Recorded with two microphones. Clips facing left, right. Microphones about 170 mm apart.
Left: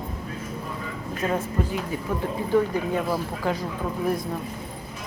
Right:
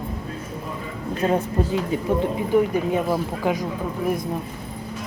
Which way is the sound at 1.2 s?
25° right (ahead or behind).